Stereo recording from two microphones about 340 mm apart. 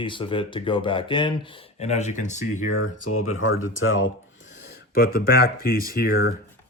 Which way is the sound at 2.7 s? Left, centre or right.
Left.